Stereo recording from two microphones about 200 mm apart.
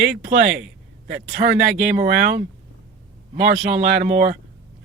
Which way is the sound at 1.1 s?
60° right (ahead or behind).